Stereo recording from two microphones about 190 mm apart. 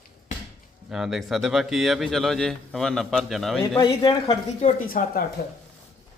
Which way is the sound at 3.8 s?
25° left (ahead or behind).